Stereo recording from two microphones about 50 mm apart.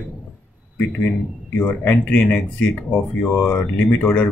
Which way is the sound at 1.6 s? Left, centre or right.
Left.